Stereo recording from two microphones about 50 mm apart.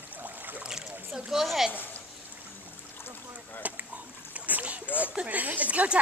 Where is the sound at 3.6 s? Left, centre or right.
Right.